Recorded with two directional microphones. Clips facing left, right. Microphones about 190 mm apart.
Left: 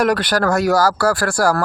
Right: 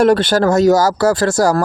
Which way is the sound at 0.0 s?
25° right (ahead or behind).